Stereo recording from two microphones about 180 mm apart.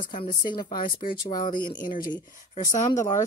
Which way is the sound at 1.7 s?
50° left (ahead or behind).